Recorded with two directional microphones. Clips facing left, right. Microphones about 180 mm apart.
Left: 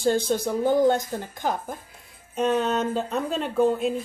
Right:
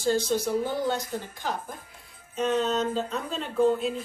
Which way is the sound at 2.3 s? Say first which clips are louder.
Left 2 dB; 55° left (ahead or behind).